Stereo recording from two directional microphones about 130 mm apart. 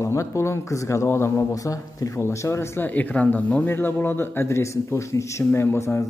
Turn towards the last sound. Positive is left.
turn(degrees=20)  # may be behind; listen again after turning